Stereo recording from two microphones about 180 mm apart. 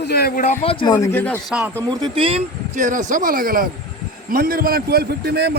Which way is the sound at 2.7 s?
45° right (ahead or behind).